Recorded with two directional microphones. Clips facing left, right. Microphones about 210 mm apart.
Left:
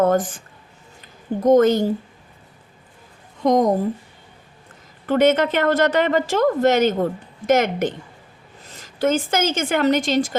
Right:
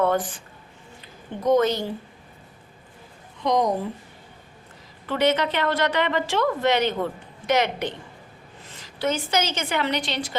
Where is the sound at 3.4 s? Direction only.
45° left (ahead or behind).